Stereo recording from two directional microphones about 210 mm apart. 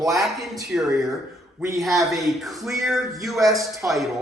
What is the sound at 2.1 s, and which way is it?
Speech, centre (ahead or behind).